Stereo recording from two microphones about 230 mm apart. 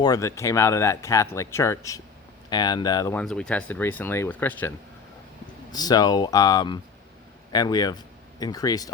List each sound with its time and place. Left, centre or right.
0.0 s speech: centre
5.7 s speech: centre